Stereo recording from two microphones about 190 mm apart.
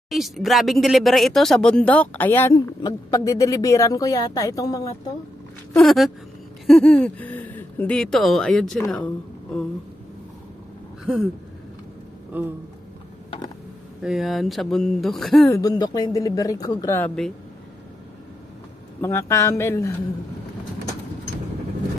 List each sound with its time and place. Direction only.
0.1 s speech: centre (ahead or behind); by 4.8 s 20° left (ahead or behind)
5.7 s speech: 5° left (ahead or behind)
12.3 s speech: 10° right (ahead or behind)
14.0 s speech: centre (ahead or behind)
15.5 s speech: 20° left (ahead or behind)
18.9 s speech: 15° left (ahead or behind)